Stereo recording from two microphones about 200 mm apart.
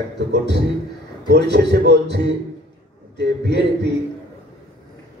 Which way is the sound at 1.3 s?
60° right (ahead or behind).